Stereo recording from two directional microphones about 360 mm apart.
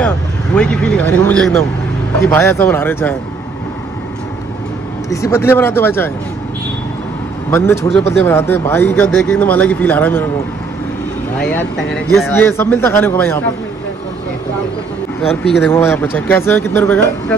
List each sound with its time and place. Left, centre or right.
0.6 s speech: centre
5.1 s speech: centre
7.5 s speech: centre
11.3 s speech: centre
15.2 s speech: centre